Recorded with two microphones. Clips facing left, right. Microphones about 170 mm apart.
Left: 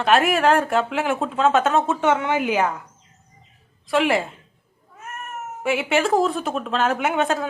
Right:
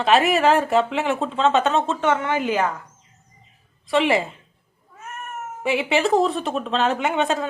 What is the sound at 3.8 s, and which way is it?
Speech, centre (ahead or behind).